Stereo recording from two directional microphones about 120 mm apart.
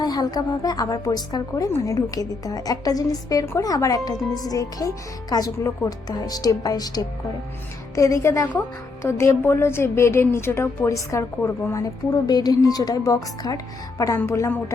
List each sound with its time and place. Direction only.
0.0 s a woman's voice: 35° left (ahead or behind)
11.8 s a woman's voice: 30° left (ahead or behind)